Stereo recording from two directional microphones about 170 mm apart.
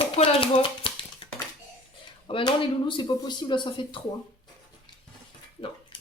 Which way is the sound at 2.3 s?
30° left (ahead or behind).